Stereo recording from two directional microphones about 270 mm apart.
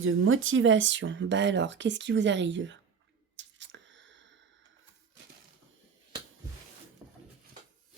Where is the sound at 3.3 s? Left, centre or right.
Right.